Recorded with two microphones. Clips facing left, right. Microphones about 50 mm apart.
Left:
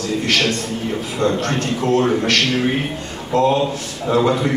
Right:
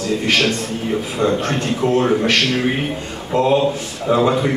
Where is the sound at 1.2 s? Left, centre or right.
Centre.